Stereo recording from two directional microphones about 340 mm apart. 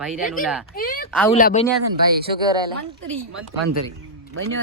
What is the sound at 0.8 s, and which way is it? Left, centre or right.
Speech, left.